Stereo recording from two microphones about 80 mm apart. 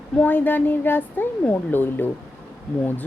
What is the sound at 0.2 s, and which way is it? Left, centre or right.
Speech, left.